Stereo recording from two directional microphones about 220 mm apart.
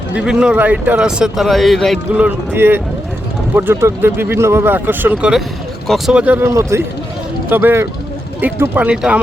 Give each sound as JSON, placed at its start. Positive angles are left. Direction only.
{"t": 0.1, "sound": "speech", "side_deg": -5}